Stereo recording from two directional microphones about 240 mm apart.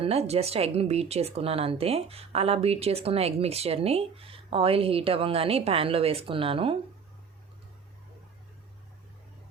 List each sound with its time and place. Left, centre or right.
0.0 s speech: right